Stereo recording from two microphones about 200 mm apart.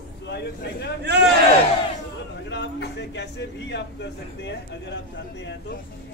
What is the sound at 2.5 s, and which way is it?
A man's voice, 60° left (ahead or behind).